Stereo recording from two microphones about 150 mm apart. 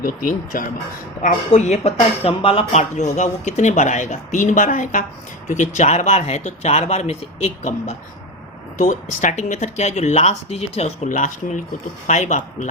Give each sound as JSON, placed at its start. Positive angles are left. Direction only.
{"t": 0.0, "sound": "speech", "side_deg": 65}
{"t": 1.2, "sound": "speech", "side_deg": 50}
{"t": 2.9, "sound": "speech", "side_deg": 50}
{"t": 11.1, "sound": "speech", "side_deg": 60}